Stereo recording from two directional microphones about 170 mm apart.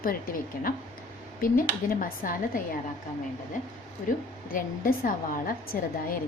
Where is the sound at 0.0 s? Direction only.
60° left (ahead or behind).